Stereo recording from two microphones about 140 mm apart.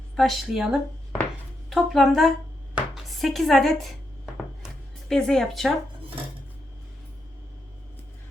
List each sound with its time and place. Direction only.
0.2 s speech: centre (ahead or behind)
4.6 s music: 5° left (ahead or behind)